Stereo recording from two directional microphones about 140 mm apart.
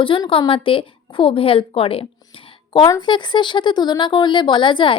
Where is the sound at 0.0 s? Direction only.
40° left (ahead or behind).